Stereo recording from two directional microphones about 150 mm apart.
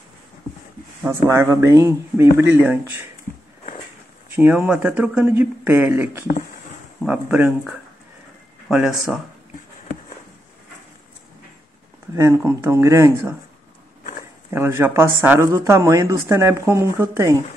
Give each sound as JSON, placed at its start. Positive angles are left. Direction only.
{"t": 1.0, "sound": "speech", "side_deg": -20}
{"t": 4.3, "sound": "speech", "side_deg": -15}
{"t": 12.2, "sound": "speech", "side_deg": -20}
{"t": 14.5, "sound": "speech", "side_deg": -15}